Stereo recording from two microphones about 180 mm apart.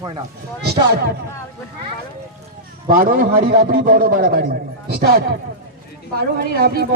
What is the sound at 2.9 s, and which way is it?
A man's voice, 50° right (ahead or behind).